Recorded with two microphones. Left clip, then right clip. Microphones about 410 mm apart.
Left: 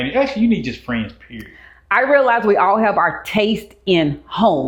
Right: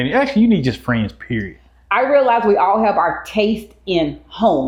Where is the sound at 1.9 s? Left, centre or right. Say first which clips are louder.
Even; left.